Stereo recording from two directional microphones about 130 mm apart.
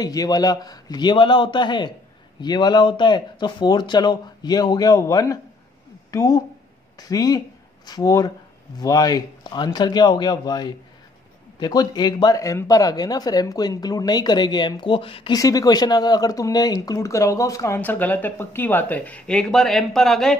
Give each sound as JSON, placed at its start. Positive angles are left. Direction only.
{"t": 0.0, "sound": "speech", "side_deg": 30}
{"t": 15.3, "sound": "speech", "side_deg": 30}